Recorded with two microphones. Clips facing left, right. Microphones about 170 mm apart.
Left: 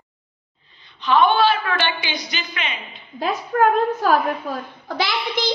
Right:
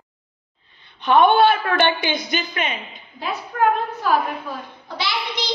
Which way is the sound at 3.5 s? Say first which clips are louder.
Left 3 dB; 55° left (ahead or behind).